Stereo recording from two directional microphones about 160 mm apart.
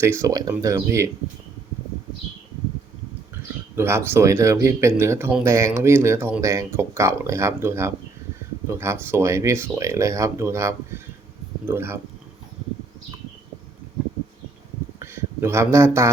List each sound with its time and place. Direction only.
0.0 s speech: 20° right (ahead or behind)
3.3 s speech: 15° right (ahead or behind)
14.9 s a sound: 15° right (ahead or behind)